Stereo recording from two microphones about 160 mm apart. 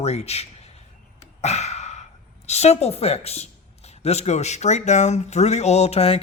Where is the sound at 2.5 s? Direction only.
40° left (ahead or behind).